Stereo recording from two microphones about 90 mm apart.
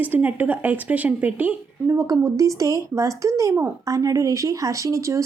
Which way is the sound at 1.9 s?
35° right (ahead or behind).